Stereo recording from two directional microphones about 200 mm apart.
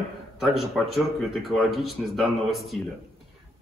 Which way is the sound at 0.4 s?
Centre (ahead or behind).